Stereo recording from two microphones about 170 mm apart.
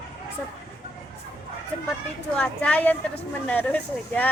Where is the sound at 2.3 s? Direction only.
5° left (ahead or behind).